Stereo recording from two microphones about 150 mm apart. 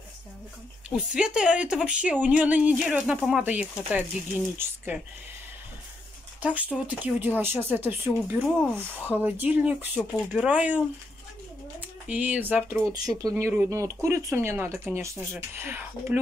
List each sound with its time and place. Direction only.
0.8 s speech: 5° right (ahead or behind)
6.4 s speech: 10° right (ahead or behind)
9.9 s speech: centre (ahead or behind)
10.5 s speech: 10° right (ahead or behind)
12.1 s speech: 10° right (ahead or behind)